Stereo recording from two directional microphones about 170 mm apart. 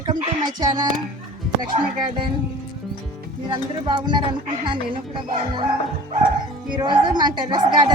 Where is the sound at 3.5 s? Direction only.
25° right (ahead or behind).